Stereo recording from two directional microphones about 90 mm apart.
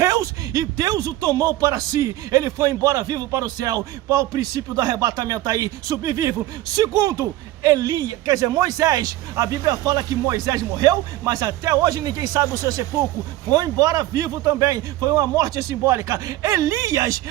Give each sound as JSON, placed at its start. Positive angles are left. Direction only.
{"t": 0.0, "sound": "speech", "side_deg": -35}
{"t": 6.7, "sound": "speech", "side_deg": -50}